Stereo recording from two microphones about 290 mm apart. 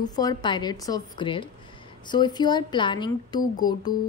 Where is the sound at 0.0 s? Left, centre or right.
Centre.